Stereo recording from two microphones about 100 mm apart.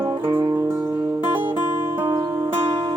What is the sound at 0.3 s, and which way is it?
Music, 45° right (ahead or behind).